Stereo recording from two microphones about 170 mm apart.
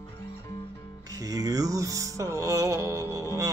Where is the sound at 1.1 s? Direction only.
20° right (ahead or behind).